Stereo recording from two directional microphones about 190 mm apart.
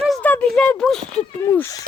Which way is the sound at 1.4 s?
15° left (ahead or behind).